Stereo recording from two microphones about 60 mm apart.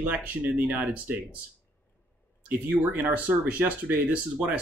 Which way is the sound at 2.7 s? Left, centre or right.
Right.